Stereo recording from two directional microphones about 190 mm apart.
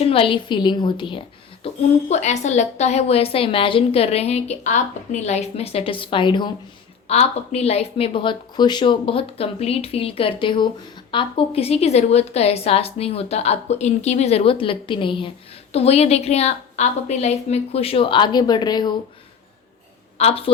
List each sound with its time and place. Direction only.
0.0 s speech: 30° left (ahead or behind)
1.6 s a woman's voice: 35° left (ahead or behind)
20.1 s a woman's voice: 30° left (ahead or behind)